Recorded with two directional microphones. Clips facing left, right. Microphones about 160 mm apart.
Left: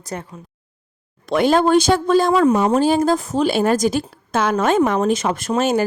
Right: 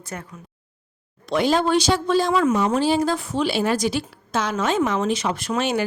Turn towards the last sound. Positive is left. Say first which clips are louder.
# left 5 dB
turn(degrees=45)  # may be behind; listen again after turning